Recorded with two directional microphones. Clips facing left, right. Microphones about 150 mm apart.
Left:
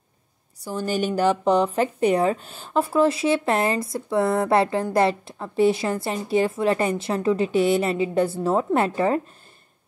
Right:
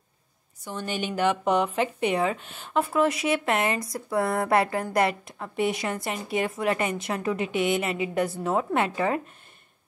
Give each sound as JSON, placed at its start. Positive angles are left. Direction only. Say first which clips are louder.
{"t": 0.8, "sound": "speech", "louder": "left 4 dB", "side_deg": 40}